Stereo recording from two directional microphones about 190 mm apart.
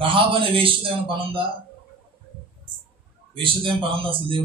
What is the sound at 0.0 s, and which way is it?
A man's voice, 25° right (ahead or behind).